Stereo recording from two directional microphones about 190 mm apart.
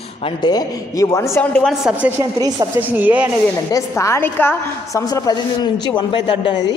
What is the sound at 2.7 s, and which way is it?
Speech, 10° right (ahead or behind).